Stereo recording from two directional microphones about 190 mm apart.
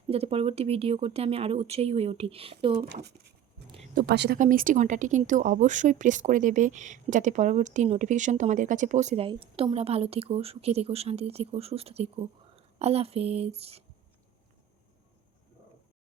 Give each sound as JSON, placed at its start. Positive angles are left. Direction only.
{"t": 0.1, "sound": "a woman's voice", "side_deg": -30}
{"t": 2.7, "sound": "speech", "side_deg": -60}
{"t": 4.4, "sound": "a woman's voice", "side_deg": -45}